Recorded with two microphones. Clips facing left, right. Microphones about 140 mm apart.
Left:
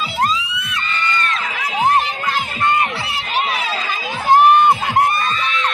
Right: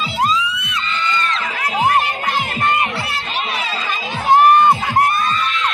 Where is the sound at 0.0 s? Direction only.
Centre (ahead or behind).